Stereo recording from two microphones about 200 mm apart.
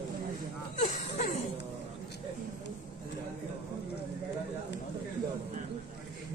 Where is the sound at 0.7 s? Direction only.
35° left (ahead or behind).